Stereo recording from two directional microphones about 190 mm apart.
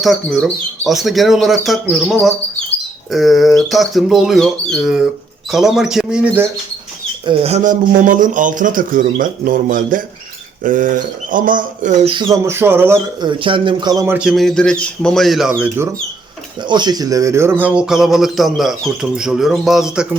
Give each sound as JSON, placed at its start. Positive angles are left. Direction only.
{"t": 0.0, "sound": "speech", "side_deg": 0}
{"t": 7.3, "sound": "speech", "side_deg": -35}
{"t": 12.1, "sound": "speech", "side_deg": -15}
{"t": 13.2, "sound": "speech", "side_deg": -25}
{"t": 16.6, "sound": "speech", "side_deg": -25}